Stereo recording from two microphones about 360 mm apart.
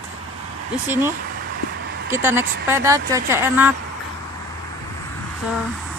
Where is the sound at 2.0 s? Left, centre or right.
Centre.